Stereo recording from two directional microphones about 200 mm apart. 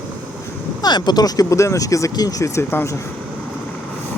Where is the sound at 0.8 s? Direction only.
20° left (ahead or behind).